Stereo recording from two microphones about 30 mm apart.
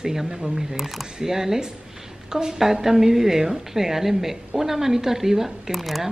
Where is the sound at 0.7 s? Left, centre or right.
Centre.